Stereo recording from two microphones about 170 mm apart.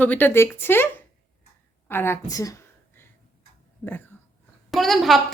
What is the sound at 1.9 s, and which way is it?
Speech, 15° left (ahead or behind).